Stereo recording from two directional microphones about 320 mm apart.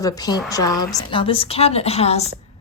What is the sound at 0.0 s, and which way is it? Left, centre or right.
Speech, centre.